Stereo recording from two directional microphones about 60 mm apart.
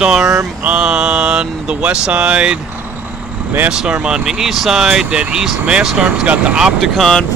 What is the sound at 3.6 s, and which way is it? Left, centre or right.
Speech, centre.